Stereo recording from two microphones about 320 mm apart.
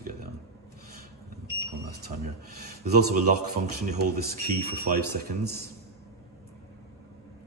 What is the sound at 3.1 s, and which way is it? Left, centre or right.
Speech, right.